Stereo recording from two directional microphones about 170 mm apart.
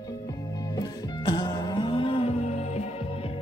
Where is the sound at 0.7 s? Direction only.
25° left (ahead or behind).